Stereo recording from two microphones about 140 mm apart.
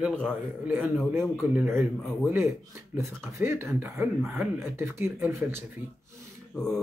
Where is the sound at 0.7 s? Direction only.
10° right (ahead or behind).